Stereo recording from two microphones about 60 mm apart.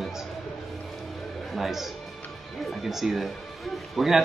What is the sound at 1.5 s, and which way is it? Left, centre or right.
Speech, centre.